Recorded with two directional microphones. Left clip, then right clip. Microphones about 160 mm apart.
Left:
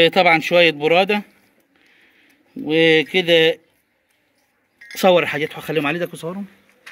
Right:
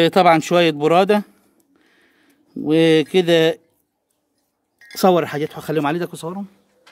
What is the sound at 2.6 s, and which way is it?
Speech, 50° right (ahead or behind).